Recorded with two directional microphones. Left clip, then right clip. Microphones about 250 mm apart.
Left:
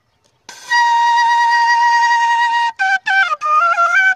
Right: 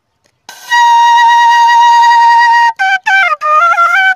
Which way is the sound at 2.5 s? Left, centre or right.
Right.